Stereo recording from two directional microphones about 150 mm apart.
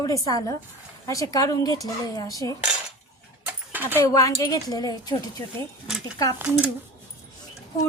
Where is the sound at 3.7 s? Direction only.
10° right (ahead or behind).